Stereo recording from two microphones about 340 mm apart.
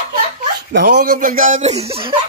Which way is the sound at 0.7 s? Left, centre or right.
Right.